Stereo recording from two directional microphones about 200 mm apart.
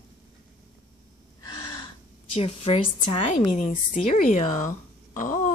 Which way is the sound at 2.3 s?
30° left (ahead or behind).